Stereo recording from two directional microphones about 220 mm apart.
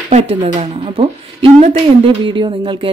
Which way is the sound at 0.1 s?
25° right (ahead or behind).